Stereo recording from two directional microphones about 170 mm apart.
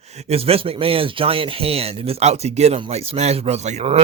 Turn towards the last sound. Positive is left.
turn(degrees=-40)  # may be behind; listen again after turning